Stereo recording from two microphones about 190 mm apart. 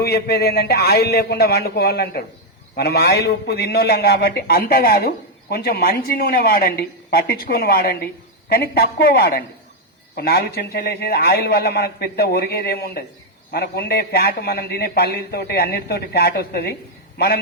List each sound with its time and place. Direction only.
0.0 s a man's voice: 55° left (ahead or behind)